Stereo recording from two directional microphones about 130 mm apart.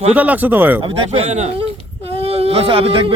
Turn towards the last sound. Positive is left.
turn(degrees=-45)  # may be behind; listen again after turning